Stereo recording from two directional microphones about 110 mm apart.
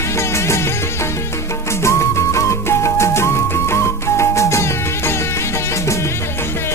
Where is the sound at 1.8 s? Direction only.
25° left (ahead or behind).